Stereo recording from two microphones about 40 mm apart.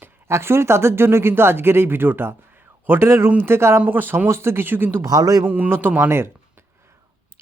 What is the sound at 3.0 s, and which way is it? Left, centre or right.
Speech, right.